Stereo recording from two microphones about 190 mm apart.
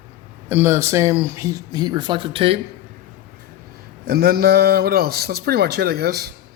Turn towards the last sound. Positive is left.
turn(degrees=-55)  # may be behind; listen again after turning